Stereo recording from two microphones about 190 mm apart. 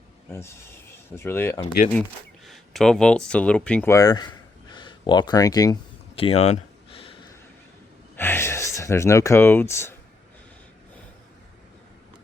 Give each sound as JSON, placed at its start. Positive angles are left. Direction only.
{"t": 0.3, "sound": "speech", "side_deg": 15}
{"t": 2.5, "sound": "speech", "side_deg": 0}
{"t": 6.1, "sound": "a sound", "side_deg": 30}
{"t": 8.1, "sound": "speech", "side_deg": 10}